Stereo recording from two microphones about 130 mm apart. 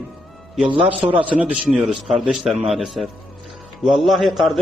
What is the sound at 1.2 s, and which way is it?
A man's voice, 10° right (ahead or behind).